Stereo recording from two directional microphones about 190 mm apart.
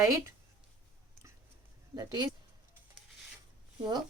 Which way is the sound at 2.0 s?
20° right (ahead or behind).